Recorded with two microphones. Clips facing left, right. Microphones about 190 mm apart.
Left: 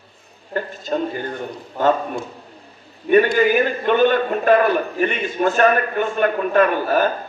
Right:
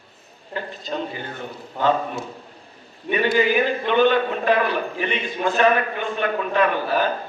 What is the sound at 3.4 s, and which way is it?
A man's voice, 45° left (ahead or behind).